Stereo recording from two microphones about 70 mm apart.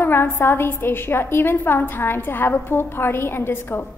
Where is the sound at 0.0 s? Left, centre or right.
Left.